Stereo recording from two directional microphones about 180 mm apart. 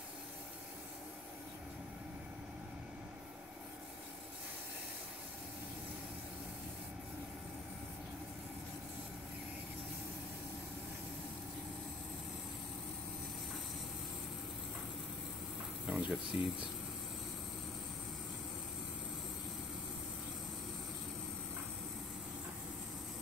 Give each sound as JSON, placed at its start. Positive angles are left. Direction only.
{"t": 15.9, "sound": "speech", "side_deg": -5}